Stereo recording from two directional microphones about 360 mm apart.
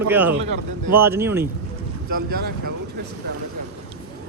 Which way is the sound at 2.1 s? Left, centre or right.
Right.